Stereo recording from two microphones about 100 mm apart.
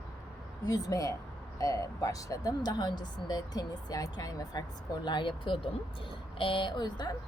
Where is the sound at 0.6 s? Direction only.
35° left (ahead or behind).